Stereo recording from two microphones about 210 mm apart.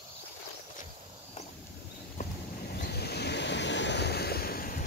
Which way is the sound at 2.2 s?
50° left (ahead or behind).